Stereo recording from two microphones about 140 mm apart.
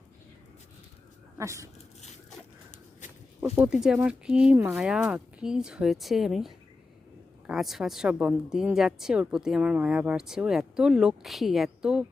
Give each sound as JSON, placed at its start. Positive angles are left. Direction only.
{"t": 1.4, "sound": "speech", "side_deg": -20}
{"t": 3.4, "sound": "speech", "side_deg": -10}